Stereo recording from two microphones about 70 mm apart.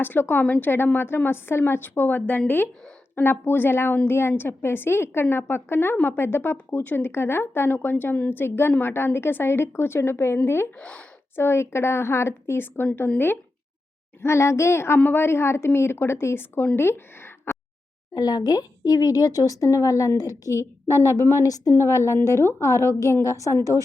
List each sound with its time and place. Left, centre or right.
0.0 s a woman's voice: left
10.8 s speech: centre
11.3 s a woman's voice: left
18.1 s speech: left
21.8 s a woman's voice: left